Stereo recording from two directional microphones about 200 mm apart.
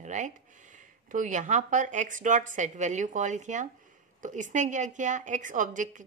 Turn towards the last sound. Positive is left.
turn(degrees=-40)  # may be behind; listen again after turning